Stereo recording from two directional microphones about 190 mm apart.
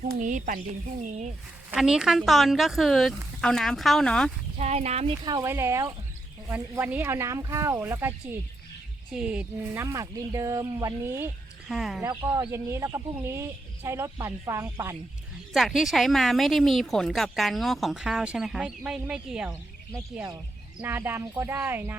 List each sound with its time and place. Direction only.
0.0 s speech: 45° right (ahead or behind)
1.7 s speech: 5° right (ahead or behind)
4.5 s speech: 35° right (ahead or behind)
5.2 s speech: 20° right (ahead or behind)
9.1 s speech: 5° right (ahead or behind)
11.7 s speech: centre (ahead or behind)
12.0 s speech: 20° right (ahead or behind)
15.5 s speech: centre (ahead or behind)
19.5 s speech: 15° right (ahead or behind)